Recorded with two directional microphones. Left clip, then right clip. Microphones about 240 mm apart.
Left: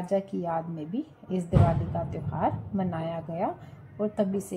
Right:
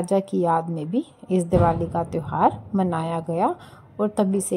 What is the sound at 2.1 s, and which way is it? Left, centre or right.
A woman's voice, right.